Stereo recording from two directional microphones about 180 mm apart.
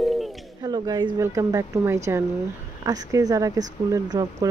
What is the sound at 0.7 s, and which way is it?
Speech, 25° right (ahead or behind).